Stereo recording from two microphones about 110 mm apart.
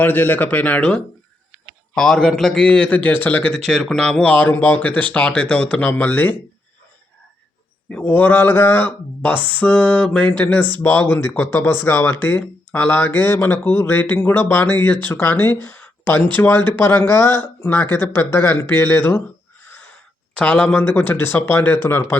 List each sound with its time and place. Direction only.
0.0 s mantra: 15° left (ahead or behind)
3.7 s mantra: centre (ahead or behind)
7.9 s mantra: 15° left (ahead or behind)
10.8 s speech: 20° left (ahead or behind)
12.2 s mantra: 20° left (ahead or behind)
15.0 s speech: 20° left (ahead or behind)
20.3 s mantra: 10° left (ahead or behind)